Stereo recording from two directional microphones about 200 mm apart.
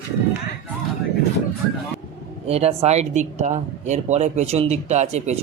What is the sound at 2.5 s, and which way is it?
Speech, 30° right (ahead or behind).